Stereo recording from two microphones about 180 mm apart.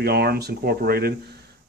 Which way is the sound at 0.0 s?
60° right (ahead or behind).